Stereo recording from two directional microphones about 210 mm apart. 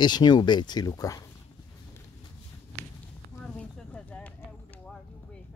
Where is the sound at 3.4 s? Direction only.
5° left (ahead or behind).